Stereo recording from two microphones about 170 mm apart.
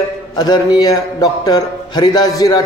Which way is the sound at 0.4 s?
25° left (ahead or behind).